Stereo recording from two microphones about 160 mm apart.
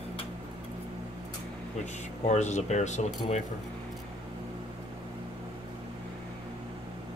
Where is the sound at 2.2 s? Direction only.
45° left (ahead or behind).